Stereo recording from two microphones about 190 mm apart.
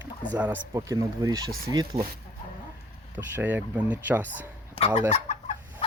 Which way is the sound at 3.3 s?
10° right (ahead or behind).